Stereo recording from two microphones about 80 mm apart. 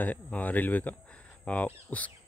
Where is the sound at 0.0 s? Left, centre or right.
Left.